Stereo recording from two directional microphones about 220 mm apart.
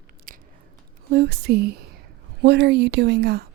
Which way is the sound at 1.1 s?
45° right (ahead or behind).